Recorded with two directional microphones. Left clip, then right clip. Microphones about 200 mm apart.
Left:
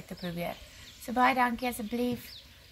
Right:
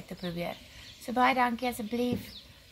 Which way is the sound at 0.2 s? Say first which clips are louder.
Even; centre (ahead or behind).